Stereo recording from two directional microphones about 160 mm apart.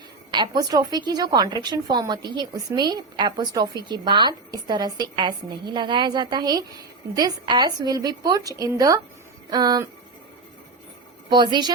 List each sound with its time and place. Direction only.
0.3 s a woman's voice: 30° right (ahead or behind)
11.3 s a woman's voice: 30° right (ahead or behind)